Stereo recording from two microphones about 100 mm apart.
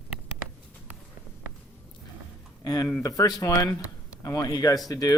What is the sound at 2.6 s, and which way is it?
Speech, 40° left (ahead or behind).